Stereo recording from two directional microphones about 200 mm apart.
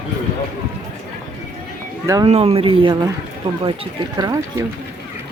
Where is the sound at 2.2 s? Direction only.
30° right (ahead or behind).